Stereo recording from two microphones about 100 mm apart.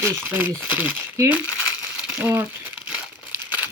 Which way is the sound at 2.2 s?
20° right (ahead or behind).